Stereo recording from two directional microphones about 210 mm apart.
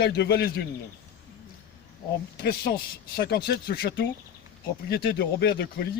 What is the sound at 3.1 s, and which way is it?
A man's voice, 50° left (ahead or behind).